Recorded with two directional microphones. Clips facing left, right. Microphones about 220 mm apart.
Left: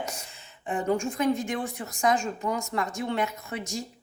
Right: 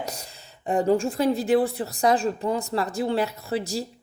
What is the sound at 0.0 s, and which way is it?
Speech, 35° right (ahead or behind).